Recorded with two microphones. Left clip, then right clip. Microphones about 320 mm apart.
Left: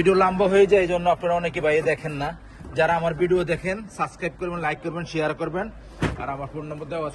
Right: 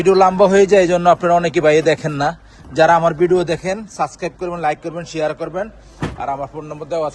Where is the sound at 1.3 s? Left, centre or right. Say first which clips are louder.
Right 9 dB; right.